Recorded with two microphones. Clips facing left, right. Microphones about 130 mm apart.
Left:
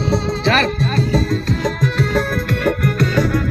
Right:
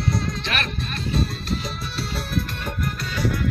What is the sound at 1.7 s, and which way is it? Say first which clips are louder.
Music: left 12 dB; 90° left.